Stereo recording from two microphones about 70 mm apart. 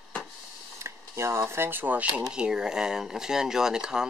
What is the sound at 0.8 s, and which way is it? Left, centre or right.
Speech, right.